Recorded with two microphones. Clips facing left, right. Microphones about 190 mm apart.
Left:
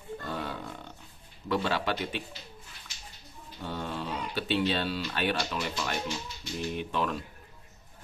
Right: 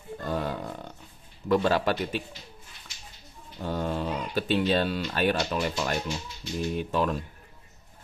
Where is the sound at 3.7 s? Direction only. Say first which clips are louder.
Right 6 dB; 45° right (ahead or behind).